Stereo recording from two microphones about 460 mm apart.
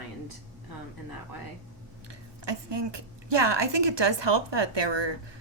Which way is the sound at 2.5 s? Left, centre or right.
Right.